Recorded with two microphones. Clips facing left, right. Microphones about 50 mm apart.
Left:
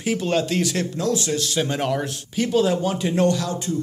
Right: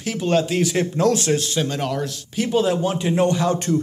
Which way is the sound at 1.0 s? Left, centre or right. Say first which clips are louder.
Right 6 dB; right.